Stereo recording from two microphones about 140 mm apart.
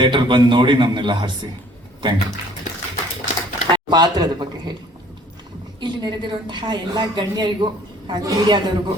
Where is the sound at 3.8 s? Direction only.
30° right (ahead or behind).